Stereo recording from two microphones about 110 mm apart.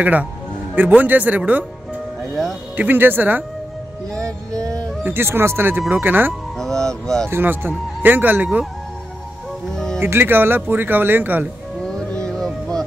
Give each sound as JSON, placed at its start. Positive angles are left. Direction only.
{"t": 0.0, "sound": "speech", "side_deg": -15}
{"t": 2.7, "sound": "speech", "side_deg": -15}
{"t": 4.2, "sound": "music", "side_deg": -30}
{"t": 5.0, "sound": "speech", "side_deg": -20}
{"t": 6.6, "sound": "speech", "side_deg": 5}
{"t": 7.2, "sound": "speech", "side_deg": -20}
{"t": 9.7, "sound": "music", "side_deg": 5}
{"t": 9.9, "sound": "speech", "side_deg": -20}
{"t": 11.8, "sound": "music", "side_deg": 5}